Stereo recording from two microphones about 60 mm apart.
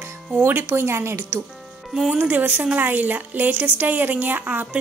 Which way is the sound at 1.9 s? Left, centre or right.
Centre.